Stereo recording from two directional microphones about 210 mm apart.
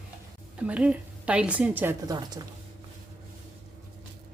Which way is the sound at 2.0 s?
20° right (ahead or behind).